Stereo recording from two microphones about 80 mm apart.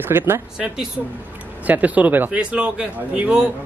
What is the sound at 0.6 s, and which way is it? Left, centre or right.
Speech, centre.